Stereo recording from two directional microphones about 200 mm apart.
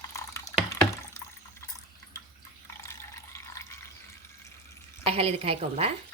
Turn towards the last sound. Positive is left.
turn(degrees=-30)  # may be behind; listen again after turning